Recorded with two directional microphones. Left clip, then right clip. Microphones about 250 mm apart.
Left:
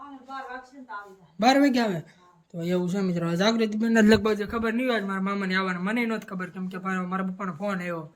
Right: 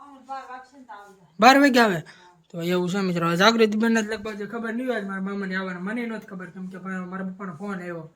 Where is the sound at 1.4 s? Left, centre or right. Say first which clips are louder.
Right 6 dB; centre.